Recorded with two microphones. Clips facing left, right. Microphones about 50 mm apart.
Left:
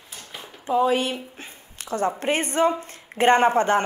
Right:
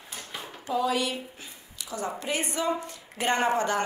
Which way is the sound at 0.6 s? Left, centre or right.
Left.